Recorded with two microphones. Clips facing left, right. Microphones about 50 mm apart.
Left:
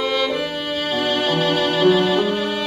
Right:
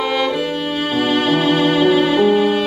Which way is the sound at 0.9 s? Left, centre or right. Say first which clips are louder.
Right 4 dB; centre.